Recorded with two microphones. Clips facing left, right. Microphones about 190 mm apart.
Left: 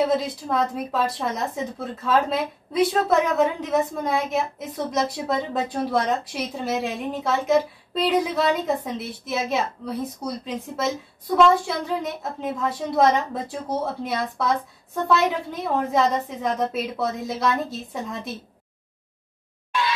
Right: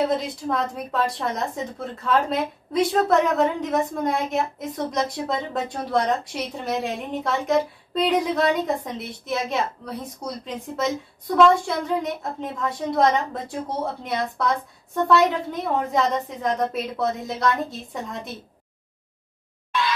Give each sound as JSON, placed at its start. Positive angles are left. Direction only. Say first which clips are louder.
{"t": 0.1, "sound": "speech", "louder": "left 1 dB", "side_deg": 0}